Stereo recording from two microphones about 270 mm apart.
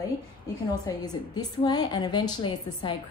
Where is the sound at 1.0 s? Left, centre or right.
Centre.